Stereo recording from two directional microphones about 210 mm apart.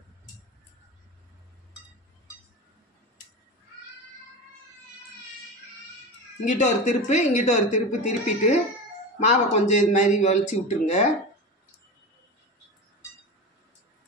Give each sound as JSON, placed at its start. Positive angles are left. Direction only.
{"t": 6.4, "sound": "speech", "side_deg": 35}